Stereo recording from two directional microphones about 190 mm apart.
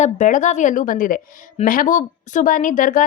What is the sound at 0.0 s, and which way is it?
A woman's voice, 40° left (ahead or behind).